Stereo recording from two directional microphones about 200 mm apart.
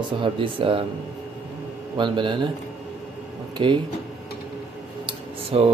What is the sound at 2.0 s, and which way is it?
Speech, 25° right (ahead or behind).